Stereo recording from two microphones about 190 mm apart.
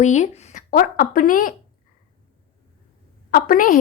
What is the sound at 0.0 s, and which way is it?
A woman's voice, 40° left (ahead or behind).